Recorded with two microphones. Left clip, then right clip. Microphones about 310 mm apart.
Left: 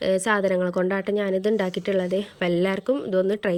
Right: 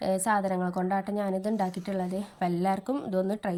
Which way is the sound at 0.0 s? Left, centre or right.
Centre.